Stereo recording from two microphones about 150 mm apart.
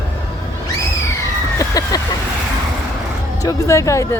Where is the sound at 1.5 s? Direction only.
25° left (ahead or behind).